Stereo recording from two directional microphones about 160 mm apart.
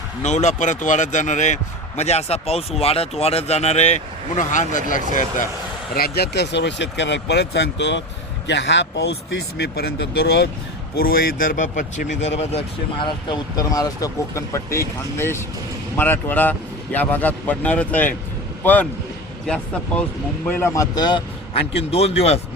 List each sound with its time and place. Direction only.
0.2 s speech: 45° left (ahead or behind)
5.9 s speech: 80° left
10.9 s speech: 70° left (ahead or behind); by 18.9 s 10° left (ahead or behind)
20.5 s a man's voice: 15° left (ahead or behind); by 22.4 s 40° left (ahead or behind)